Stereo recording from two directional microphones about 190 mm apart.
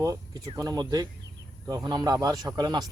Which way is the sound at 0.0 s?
20° right (ahead or behind).